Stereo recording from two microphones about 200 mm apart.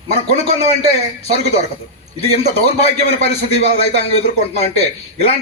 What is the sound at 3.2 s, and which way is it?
A man's voice, 30° left (ahead or behind).